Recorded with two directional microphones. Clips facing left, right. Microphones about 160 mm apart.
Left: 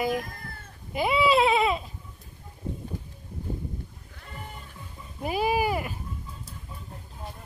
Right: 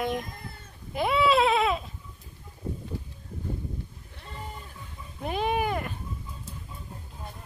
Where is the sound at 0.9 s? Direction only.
Centre (ahead or behind).